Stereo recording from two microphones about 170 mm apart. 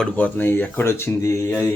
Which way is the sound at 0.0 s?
10° left (ahead or behind).